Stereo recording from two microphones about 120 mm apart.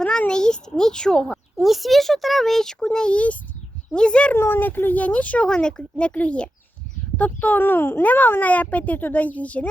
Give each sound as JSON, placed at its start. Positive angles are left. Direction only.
{"t": 0.0, "sound": "a child's voice", "side_deg": 10}
{"t": 4.4, "sound": "speech", "side_deg": 20}